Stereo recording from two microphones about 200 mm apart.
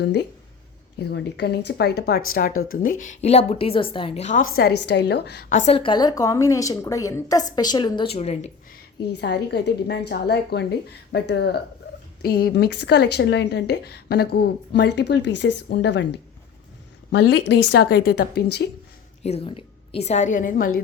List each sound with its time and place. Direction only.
0.0 s speech: 55° left (ahead or behind)
3.0 s a woman's voice: 35° left (ahead or behind); by 5.5 s 55° left (ahead or behind)
5.5 s a woman's voice: 30° left (ahead or behind)
8.7 s speech: 55° left (ahead or behind)
19.2 s a woman's voice: 30° left (ahead or behind)